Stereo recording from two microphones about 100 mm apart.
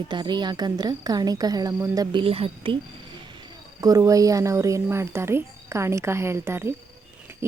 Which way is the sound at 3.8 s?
35° right (ahead or behind).